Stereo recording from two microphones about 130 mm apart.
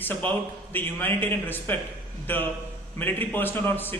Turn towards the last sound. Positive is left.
turn(degrees=15)  # may be behind; listen again after turning